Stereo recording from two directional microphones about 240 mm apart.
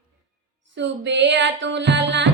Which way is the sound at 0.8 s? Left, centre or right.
Right.